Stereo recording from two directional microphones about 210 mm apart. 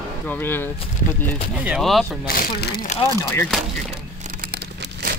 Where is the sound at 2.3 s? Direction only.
45° left (ahead or behind).